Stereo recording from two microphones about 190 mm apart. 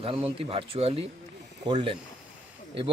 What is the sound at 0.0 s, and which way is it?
A man's voice, 30° right (ahead or behind).